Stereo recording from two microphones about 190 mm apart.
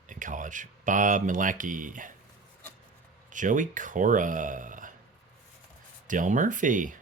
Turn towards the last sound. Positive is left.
turn(degrees=-45)  # may be behind; listen again after turning